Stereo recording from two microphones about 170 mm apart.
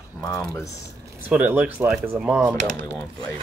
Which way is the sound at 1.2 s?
10° right (ahead or behind).